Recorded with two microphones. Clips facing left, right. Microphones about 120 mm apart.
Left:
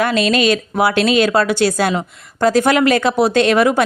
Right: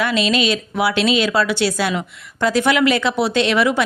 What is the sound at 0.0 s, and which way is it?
A woman's voice, 45° left (ahead or behind).